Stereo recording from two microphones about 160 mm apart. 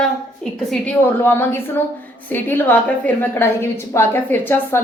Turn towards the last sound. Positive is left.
turn(degrees=15)  # may be behind; listen again after turning